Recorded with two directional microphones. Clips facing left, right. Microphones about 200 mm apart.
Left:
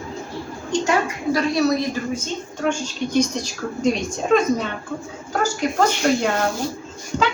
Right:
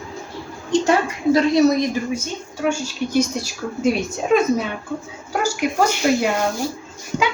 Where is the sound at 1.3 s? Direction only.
20° right (ahead or behind).